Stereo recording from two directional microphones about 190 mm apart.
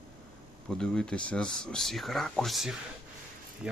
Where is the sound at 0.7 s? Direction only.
5° left (ahead or behind).